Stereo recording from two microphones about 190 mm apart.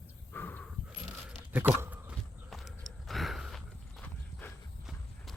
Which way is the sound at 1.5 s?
10° right (ahead or behind).